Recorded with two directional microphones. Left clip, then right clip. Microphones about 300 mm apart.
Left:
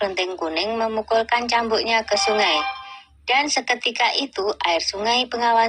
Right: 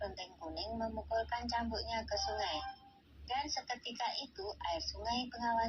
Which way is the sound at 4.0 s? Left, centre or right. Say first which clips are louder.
Left 19 dB; left.